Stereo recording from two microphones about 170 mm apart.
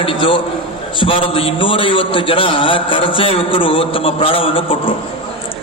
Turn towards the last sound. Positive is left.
turn(degrees=30)  # may be behind; listen again after turning